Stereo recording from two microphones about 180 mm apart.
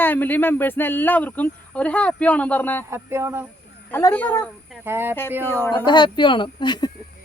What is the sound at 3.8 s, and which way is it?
Speech, 10° left (ahead or behind).